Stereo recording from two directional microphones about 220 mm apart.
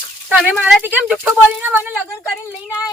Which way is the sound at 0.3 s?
5° right (ahead or behind).